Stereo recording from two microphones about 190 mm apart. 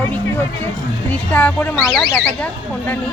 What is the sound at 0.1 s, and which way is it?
Speech, 10° left (ahead or behind).